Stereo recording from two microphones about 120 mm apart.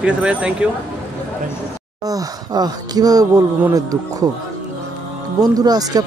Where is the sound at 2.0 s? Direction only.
30° right (ahead or behind).